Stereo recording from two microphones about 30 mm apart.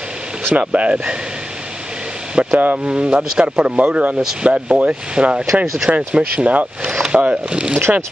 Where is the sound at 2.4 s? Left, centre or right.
Right.